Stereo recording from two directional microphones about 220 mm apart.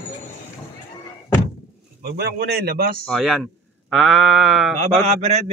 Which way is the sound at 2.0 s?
45° right (ahead or behind).